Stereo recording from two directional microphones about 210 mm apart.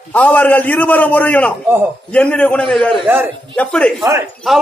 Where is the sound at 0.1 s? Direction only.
5° left (ahead or behind).